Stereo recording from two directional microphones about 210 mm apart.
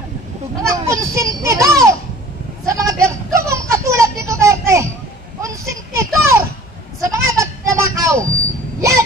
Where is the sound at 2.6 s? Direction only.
15° right (ahead or behind).